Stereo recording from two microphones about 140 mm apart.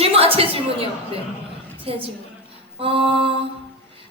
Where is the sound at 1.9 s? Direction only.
45° right (ahead or behind).